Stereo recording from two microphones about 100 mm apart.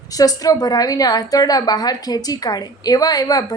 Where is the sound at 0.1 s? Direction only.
40° left (ahead or behind).